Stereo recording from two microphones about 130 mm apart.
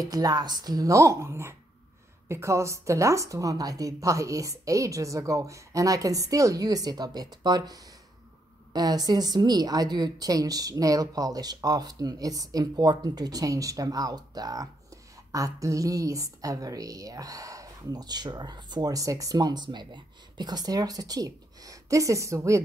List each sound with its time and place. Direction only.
0.0 s a woman's voice: 30° right (ahead or behind)